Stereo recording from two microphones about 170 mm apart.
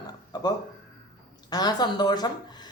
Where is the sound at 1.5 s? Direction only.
25° left (ahead or behind).